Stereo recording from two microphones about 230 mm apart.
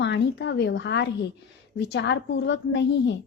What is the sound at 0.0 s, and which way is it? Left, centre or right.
A woman's voice, left.